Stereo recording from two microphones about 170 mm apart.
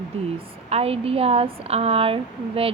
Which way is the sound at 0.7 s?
35° right (ahead or behind).